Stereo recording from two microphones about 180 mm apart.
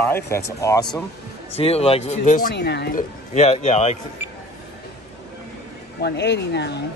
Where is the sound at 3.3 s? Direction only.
40° left (ahead or behind).